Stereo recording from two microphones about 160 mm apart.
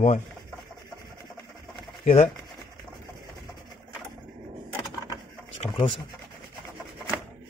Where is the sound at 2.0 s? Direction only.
40° left (ahead or behind).